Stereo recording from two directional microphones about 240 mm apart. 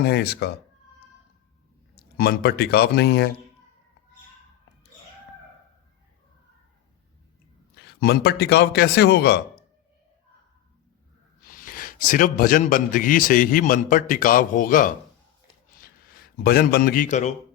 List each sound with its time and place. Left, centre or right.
0.0 s speech: left
2.0 s a man's voice: left
8.0 s speech: left
11.4 s a man's voice: left
15.7 s a sound: left